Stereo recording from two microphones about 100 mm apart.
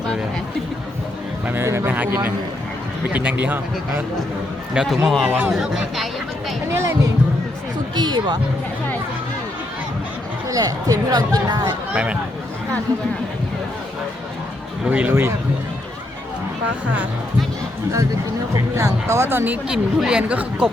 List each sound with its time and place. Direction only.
1.5 s speech: 20° right (ahead or behind)
4.7 s speech: 5° right (ahead or behind)
6.7 s speech: 30° right (ahead or behind)
7.9 s speech: 45° right (ahead or behind)
10.5 s speech: 35° right (ahead or behind)
14.8 s speech: 15° right (ahead or behind)
15.1 s speech: 25° right (ahead or behind)
18.5 s speech: 30° right (ahead or behind)
19.6 s speech: 10° right (ahead or behind)